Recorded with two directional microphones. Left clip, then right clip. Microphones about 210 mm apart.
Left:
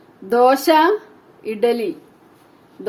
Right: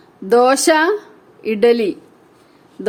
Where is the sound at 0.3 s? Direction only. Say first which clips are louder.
Right 2 dB; 35° right (ahead or behind).